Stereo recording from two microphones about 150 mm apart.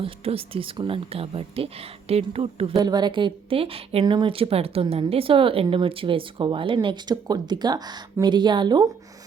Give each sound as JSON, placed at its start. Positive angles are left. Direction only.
{"t": 0.0, "sound": "speech", "side_deg": -40}
{"t": 2.7, "sound": "speech", "side_deg": -25}